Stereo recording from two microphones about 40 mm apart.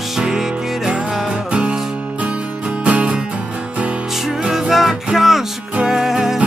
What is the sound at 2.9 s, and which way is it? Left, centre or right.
Music, right.